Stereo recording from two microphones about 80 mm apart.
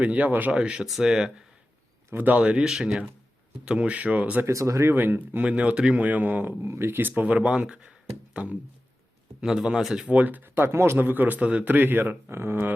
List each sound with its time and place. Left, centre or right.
0.0 s speech: centre
2.1 s speech: right
4.4 s a man's voice: right
5.5 s a man's voice: centre
7.2 s speech: centre
10.1 s a man's voice: right